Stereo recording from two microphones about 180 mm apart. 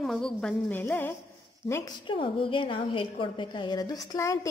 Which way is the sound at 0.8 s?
10° left (ahead or behind).